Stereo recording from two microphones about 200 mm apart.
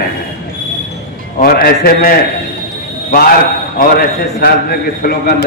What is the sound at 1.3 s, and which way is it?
A man's voice, 50° left (ahead or behind).